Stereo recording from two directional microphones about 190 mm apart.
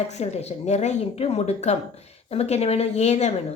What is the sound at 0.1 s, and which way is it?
Speech, 35° left (ahead or behind).